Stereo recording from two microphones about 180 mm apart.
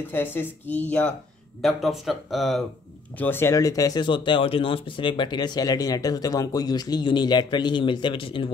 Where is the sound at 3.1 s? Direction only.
10° left (ahead or behind); by 8.5 s 30° left (ahead or behind).